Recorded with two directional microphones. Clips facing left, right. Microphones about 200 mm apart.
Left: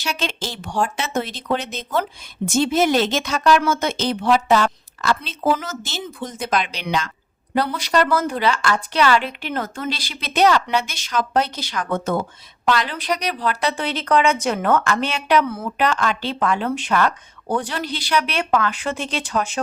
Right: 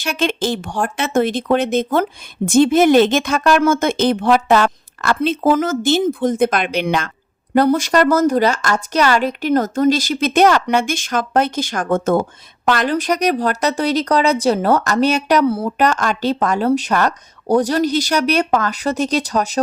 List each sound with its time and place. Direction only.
0.0 s speech: 55° right (ahead or behind)